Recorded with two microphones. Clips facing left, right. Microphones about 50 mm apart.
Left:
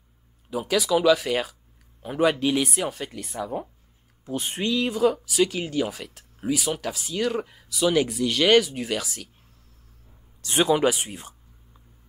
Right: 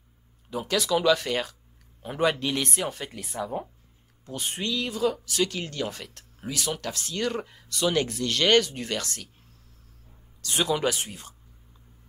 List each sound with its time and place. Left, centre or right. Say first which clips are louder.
0.5 s speech: left 3 dB; centre
4.3 s speech: left 4 dB; centre
10.4 s speech: left 5 dB; left